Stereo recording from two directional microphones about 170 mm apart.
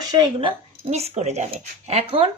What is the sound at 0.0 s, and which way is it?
Speech, 25° right (ahead or behind).